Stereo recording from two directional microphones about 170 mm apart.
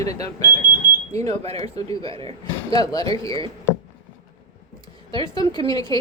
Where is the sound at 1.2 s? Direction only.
40° right (ahead or behind).